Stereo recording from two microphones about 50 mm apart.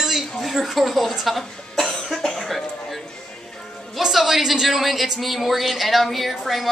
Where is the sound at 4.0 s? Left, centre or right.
Centre.